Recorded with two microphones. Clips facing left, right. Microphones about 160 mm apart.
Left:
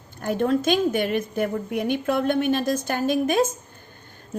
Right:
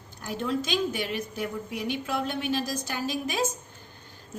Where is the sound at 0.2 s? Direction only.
55° left (ahead or behind).